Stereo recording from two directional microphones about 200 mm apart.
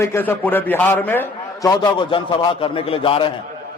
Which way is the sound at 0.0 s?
10° left (ahead or behind).